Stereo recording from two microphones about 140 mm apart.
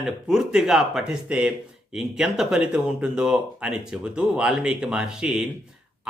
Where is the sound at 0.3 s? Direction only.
5° right (ahead or behind).